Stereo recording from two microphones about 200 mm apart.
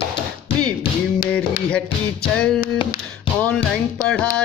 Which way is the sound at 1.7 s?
5° left (ahead or behind).